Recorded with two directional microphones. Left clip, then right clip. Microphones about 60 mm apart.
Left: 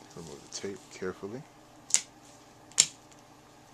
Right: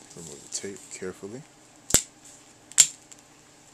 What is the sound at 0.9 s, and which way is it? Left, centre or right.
Speech, right.